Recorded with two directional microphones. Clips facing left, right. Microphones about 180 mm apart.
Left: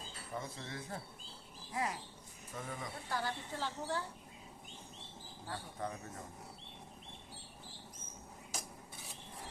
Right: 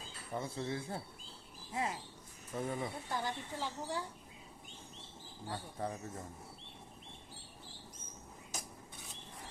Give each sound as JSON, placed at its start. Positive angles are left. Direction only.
{"t": 0.3, "sound": "speech", "side_deg": -30}
{"t": 5.8, "sound": "speech", "side_deg": -30}